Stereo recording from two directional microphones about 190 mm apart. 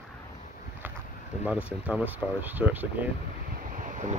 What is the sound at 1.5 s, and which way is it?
Speech, 5° right (ahead or behind).